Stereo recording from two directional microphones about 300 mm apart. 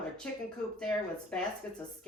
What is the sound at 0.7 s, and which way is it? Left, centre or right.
Speech, centre.